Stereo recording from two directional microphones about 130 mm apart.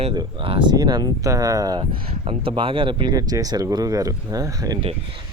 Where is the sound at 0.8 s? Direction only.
30° right (ahead or behind).